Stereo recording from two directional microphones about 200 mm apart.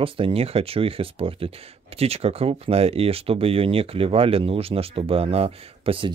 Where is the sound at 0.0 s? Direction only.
25° right (ahead or behind).